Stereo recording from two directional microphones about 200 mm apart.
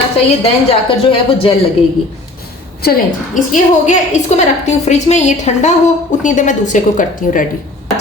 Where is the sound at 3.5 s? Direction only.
40° left (ahead or behind).